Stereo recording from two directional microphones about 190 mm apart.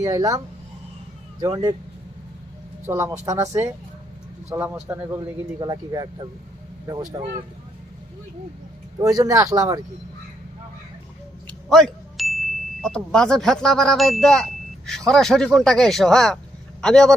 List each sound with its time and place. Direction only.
0.0 s a man's voice: 20° right (ahead or behind)
2.8 s a man's voice: 15° right (ahead or behind)
9.0 s speech: 20° right (ahead or behind)
11.7 s speech: centre (ahead or behind)